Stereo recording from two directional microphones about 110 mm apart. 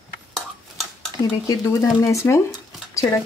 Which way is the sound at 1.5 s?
30° left (ahead or behind).